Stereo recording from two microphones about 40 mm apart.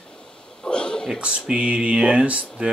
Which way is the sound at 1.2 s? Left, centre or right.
Right.